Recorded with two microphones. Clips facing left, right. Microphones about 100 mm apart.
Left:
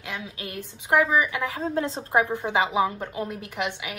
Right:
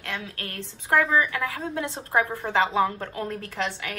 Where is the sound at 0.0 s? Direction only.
10° left (ahead or behind); by 2.2 s 25° left (ahead or behind).